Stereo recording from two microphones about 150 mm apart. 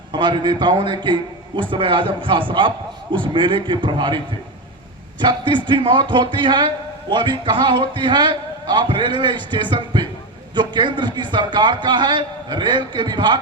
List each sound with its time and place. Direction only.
0.1 s a man's voice: 30° right (ahead or behind)
5.2 s a man's voice: 30° right (ahead or behind)